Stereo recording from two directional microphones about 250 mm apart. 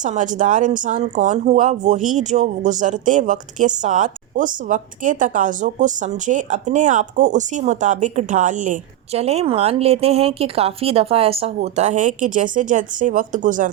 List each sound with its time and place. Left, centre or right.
0.0 s speech: right